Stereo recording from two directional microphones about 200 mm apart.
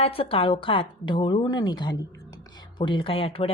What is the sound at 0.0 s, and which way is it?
Speech, 30° left (ahead or behind).